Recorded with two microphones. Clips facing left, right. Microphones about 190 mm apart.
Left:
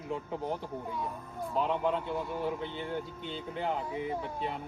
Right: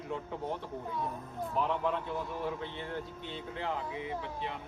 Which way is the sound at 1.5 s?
30° left (ahead or behind).